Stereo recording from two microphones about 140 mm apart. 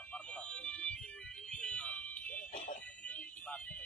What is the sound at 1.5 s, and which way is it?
Fire alarm, 5° left (ahead or behind).